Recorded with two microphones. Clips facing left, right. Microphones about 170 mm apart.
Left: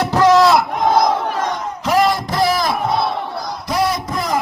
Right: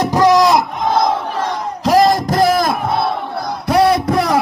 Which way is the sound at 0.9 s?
30° right (ahead or behind).